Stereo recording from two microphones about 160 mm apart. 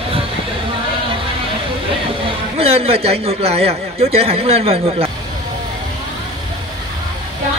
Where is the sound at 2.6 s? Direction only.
40° right (ahead or behind).